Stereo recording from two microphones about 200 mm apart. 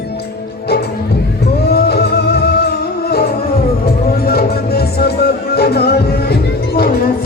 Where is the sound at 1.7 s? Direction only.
55° left (ahead or behind).